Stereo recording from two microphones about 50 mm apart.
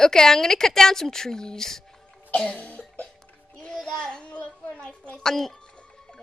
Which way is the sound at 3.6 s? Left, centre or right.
Centre.